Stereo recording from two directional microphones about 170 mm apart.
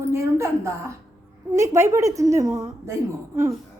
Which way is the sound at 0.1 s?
15° right (ahead or behind).